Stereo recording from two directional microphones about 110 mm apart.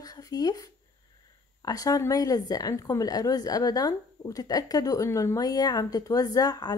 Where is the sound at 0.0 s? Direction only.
35° left (ahead or behind).